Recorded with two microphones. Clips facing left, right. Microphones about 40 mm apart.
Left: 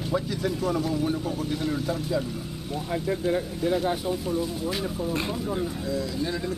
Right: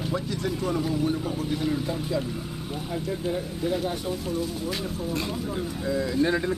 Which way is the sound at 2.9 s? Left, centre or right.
Centre.